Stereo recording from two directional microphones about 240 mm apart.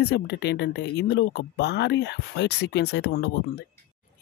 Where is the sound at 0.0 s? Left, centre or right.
Left.